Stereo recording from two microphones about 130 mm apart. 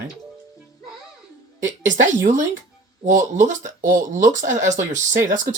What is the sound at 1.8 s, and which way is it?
Speech, 75° right (ahead or behind).